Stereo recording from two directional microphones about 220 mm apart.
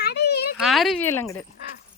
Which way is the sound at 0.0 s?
50° left (ahead or behind).